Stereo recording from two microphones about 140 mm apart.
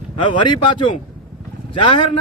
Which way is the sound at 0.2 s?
35° left (ahead or behind).